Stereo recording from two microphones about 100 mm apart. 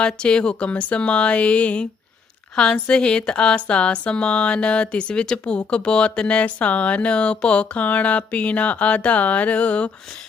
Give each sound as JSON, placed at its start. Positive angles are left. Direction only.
{"t": 0.0, "sound": "speech", "side_deg": 10}